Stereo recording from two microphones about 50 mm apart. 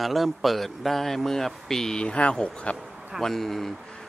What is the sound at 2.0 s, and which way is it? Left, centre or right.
A man's voice, left.